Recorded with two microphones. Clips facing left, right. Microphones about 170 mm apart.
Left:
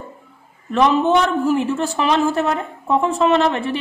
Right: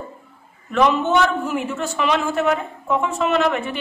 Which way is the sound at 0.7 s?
35° left (ahead or behind).